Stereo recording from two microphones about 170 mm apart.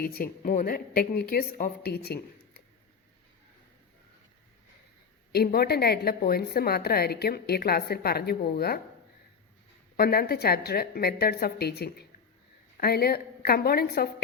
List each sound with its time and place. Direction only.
0.0 s a woman's voice: 60° left (ahead or behind)
5.3 s a woman's voice: 65° left (ahead or behind)
10.0 s a woman's voice: 65° left (ahead or behind)